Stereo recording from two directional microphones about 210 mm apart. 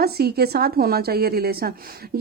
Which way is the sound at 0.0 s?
50° right (ahead or behind).